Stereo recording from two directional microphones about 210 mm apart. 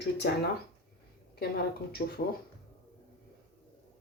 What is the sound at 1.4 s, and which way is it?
Speech, 45° left (ahead or behind).